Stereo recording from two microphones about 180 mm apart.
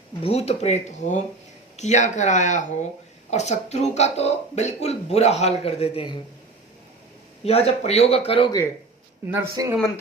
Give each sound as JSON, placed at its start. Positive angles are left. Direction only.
{"t": 0.2, "sound": "speech", "side_deg": 35}
{"t": 7.4, "sound": "speech", "side_deg": 35}
{"t": 9.2, "sound": "speech", "side_deg": -10}